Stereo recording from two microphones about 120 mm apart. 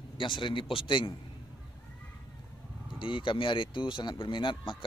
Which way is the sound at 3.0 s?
45° left (ahead or behind).